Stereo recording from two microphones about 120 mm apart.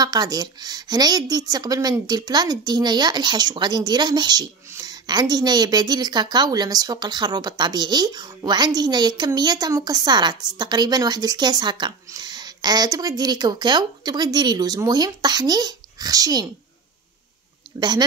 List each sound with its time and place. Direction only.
0.0 s a woman's voice: 35° right (ahead or behind)
17.7 s a woman's voice: 35° right (ahead or behind)